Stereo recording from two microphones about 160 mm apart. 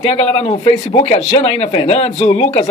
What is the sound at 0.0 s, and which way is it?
Speech, 40° left (ahead or behind).